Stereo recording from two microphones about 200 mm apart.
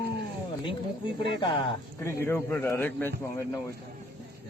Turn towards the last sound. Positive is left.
turn(degrees=10)  # may be behind; listen again after turning